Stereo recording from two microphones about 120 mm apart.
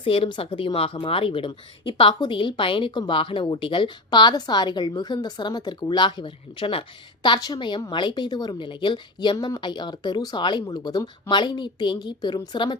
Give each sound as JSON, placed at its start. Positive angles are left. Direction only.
{"t": 0.0, "sound": "speech", "side_deg": 50}
{"t": 7.3, "sound": "speech", "side_deg": 35}